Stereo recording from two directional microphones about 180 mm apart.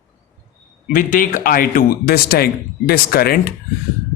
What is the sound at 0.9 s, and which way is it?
Speech, 50° left (ahead or behind).